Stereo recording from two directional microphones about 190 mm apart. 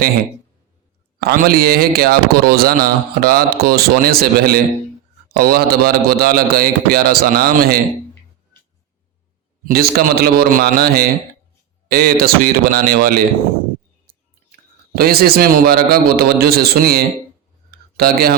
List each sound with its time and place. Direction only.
1.2 s speech: 55° right (ahead or behind)
9.6 s speech: 55° right (ahead or behind)
14.9 s speech: 50° right (ahead or behind)
17.7 s a sound: 55° right (ahead or behind)